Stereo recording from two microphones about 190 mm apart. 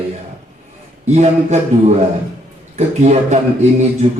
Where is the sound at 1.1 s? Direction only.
35° right (ahead or behind).